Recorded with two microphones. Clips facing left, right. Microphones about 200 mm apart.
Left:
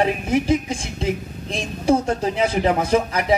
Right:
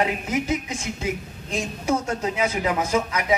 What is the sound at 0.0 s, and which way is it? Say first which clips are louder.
A woman's voice: left 4 dB; 30° left (ahead or behind).